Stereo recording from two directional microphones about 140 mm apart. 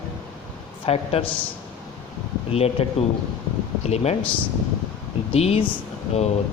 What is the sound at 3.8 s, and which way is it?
Speech, 50° left (ahead or behind).